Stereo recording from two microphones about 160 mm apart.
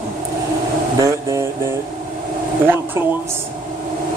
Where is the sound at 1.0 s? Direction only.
20° right (ahead or behind).